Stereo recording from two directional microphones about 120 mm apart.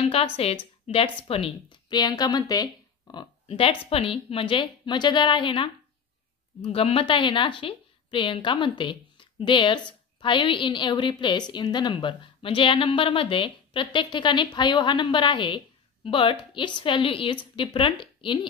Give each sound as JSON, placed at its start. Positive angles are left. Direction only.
{"t": 0.0, "sound": "a woman's voice", "side_deg": 55}
{"t": 1.9, "sound": "speech", "side_deg": 35}
{"t": 3.4, "sound": "a woman's voice", "side_deg": 50}
{"t": 6.6, "sound": "a woman's voice", "side_deg": 55}